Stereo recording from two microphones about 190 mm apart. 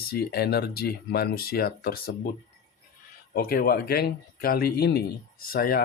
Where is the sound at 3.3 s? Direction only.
50° left (ahead or behind).